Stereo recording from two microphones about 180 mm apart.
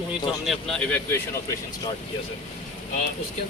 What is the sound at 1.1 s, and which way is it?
Speech, 15° left (ahead or behind).